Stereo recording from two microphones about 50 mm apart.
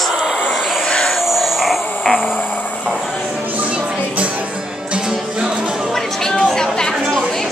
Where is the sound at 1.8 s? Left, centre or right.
Left.